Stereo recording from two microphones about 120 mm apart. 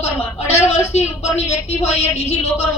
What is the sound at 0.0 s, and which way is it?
A woman's voice, 60° left (ahead or behind).